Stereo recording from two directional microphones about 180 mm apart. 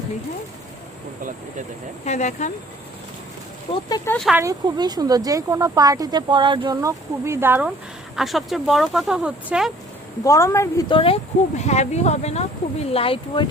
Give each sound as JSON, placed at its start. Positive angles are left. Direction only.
{"t": 2.0, "sound": "speech", "side_deg": 40}
{"t": 3.8, "sound": "speech", "side_deg": 20}
{"t": 4.1, "sound": "speech", "side_deg": 0}
{"t": 4.4, "sound": "speech", "side_deg": -20}
{"t": 8.1, "sound": "speech", "side_deg": 0}
{"t": 10.2, "sound": "speech", "side_deg": 15}